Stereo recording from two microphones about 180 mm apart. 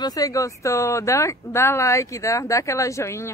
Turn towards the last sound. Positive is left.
turn(degrees=15)  # may be behind; listen again after turning